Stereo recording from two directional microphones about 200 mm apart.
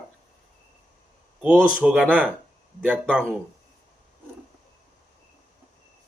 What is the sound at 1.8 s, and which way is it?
Speech, 5° right (ahead or behind).